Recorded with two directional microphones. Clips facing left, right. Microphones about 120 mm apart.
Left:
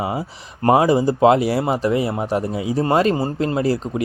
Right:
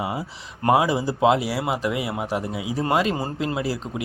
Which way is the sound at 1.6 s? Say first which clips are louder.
Left 6 dB; 35° left (ahead or behind).